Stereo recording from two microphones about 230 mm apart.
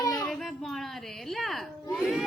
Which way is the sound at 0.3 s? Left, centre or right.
Centre.